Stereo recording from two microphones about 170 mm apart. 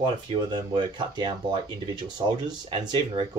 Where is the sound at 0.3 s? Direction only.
25° right (ahead or behind).